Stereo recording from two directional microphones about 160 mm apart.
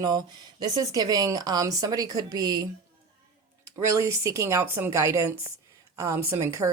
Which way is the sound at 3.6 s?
20° right (ahead or behind).